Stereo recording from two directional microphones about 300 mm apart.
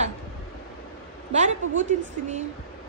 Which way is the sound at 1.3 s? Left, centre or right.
Right.